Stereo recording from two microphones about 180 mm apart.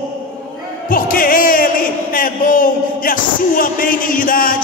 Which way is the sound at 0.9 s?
50° left (ahead or behind).